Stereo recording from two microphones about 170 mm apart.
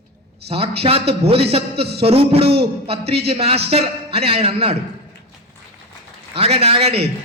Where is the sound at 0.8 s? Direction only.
35° right (ahead or behind).